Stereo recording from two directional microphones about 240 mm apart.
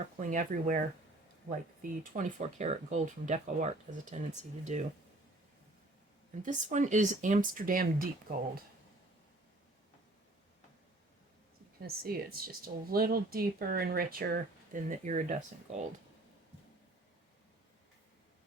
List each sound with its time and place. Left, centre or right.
0.2 s speech: right
6.4 s speech: right
11.8 s speech: right